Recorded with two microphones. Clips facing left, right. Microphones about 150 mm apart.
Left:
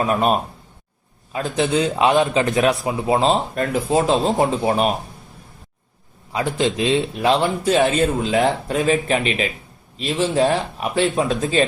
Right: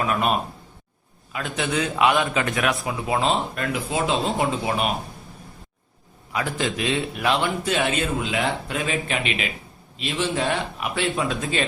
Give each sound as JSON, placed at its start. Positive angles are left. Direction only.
{"t": 0.0, "sound": "a man's voice", "side_deg": 35}
{"t": 6.3, "sound": "a man's voice", "side_deg": 25}